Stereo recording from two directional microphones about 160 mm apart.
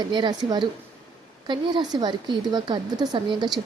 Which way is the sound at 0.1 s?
25° right (ahead or behind).